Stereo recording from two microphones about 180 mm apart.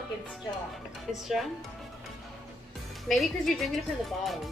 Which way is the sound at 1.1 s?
Centre (ahead or behind).